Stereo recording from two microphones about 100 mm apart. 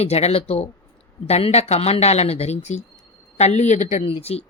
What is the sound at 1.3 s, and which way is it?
Speech, 90° left.